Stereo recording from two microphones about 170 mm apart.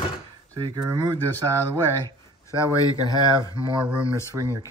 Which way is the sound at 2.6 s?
20° left (ahead or behind).